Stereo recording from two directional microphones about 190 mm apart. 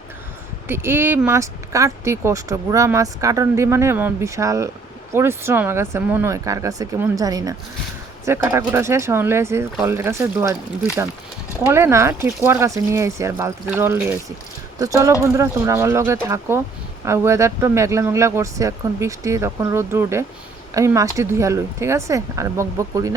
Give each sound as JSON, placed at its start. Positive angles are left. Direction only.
{"t": 0.7, "sound": "speech", "side_deg": -10}